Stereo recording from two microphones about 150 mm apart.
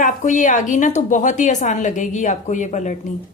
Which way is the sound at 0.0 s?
55° left (ahead or behind).